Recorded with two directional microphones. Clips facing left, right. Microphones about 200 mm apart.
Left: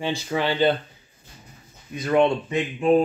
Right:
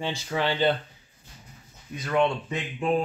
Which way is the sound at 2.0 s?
20° left (ahead or behind).